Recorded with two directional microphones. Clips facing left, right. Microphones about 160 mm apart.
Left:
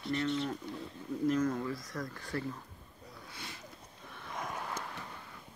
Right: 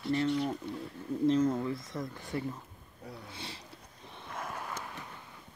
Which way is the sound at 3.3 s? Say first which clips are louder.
Right 3 dB; 30° right (ahead or behind).